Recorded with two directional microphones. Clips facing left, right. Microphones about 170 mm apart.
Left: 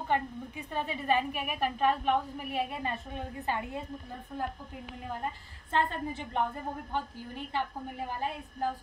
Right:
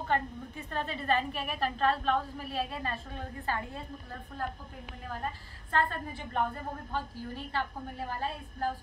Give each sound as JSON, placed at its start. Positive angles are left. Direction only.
{"t": 0.1, "sound": "a woman's voice", "side_deg": 10}
{"t": 5.1, "sound": "a woman's voice", "side_deg": 20}